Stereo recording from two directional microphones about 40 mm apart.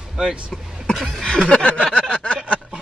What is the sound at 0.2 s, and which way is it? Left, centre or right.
Speech, right.